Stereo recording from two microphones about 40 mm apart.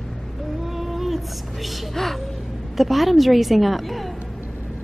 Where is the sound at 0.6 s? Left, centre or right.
Centre.